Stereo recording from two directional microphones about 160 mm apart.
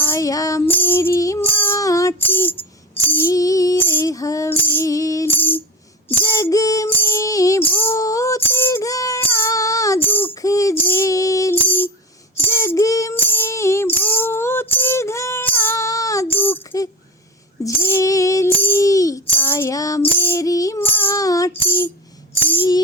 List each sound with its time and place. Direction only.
0.0 s music: 15° left (ahead or behind)
21.6 s tambourine: 15° left (ahead or behind)